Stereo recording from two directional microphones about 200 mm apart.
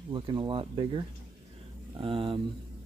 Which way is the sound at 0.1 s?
25° right (ahead or behind).